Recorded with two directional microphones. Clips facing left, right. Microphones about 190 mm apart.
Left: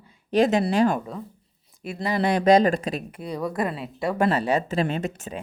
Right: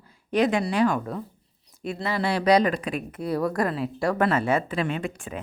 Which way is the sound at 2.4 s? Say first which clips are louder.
Left 2 dB; 45° left (ahead or behind).